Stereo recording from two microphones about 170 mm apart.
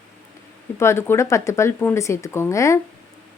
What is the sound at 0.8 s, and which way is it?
Speech, 15° left (ahead or behind).